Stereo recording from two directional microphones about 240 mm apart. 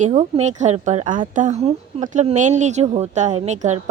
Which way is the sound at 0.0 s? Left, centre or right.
Right.